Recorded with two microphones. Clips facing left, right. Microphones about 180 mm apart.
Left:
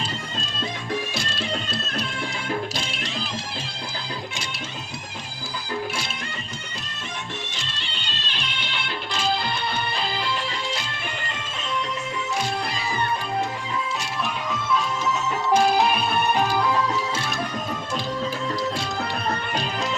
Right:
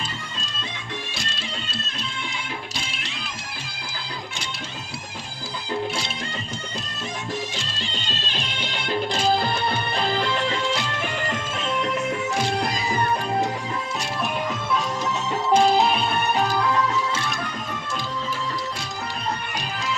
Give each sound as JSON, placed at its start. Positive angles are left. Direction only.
{"t": 7.8, "sound": "music", "side_deg": -40}
{"t": 11.6, "sound": "music", "side_deg": -50}
{"t": 15.5, "sound": "music", "side_deg": -25}
{"t": 16.4, "sound": "music", "side_deg": 5}